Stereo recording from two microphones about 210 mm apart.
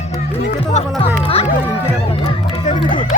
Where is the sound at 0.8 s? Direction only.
30° left (ahead or behind).